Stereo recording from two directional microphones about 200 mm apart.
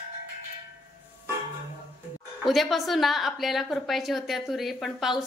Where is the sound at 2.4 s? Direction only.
Centre (ahead or behind).